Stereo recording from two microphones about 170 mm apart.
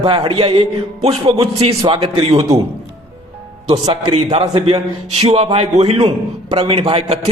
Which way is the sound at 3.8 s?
25° right (ahead or behind).